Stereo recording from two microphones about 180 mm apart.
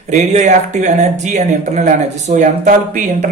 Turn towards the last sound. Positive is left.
turn(degrees=-45)  # may be behind; listen again after turning